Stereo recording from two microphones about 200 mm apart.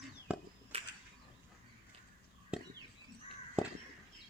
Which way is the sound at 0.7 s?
30° right (ahead or behind).